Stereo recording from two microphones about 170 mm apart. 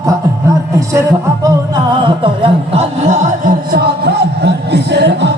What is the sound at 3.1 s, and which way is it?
Music, 55° right (ahead or behind).